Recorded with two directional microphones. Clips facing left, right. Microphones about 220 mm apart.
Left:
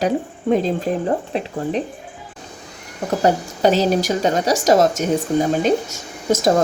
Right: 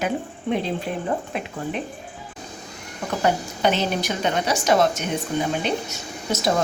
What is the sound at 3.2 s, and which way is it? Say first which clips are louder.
Speech: left 5 dB; 40° left (ahead or behind).